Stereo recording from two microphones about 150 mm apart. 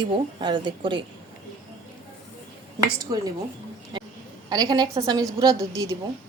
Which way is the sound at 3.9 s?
30° right (ahead or behind).